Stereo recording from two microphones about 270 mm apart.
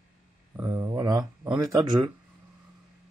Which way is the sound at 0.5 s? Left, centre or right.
Centre.